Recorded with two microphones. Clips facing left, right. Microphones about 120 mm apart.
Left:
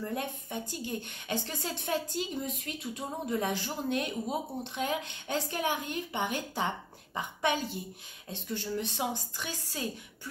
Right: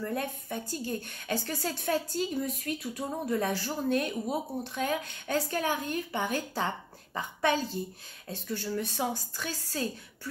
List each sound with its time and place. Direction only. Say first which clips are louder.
0.0 s a woman's voice: right 2 dB; 20° left (ahead or behind)